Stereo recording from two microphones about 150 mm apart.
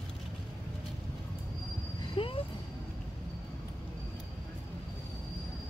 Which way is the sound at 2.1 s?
35° left (ahead or behind).